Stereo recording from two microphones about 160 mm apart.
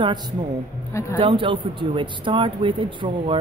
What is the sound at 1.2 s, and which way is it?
Speech, 30° right (ahead or behind).